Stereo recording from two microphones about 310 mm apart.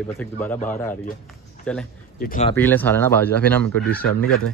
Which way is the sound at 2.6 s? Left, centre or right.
Centre.